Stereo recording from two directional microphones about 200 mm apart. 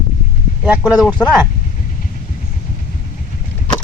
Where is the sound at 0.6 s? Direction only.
5° right (ahead or behind).